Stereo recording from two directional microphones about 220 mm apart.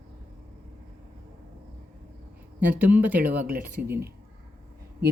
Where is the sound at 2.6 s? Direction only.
10° right (ahead or behind).